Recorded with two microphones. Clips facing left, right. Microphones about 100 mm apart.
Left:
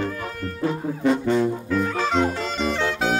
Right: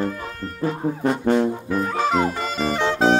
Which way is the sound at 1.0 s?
50° right (ahead or behind).